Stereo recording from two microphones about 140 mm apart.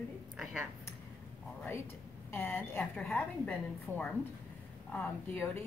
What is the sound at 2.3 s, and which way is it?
A woman's voice, 15° left (ahead or behind).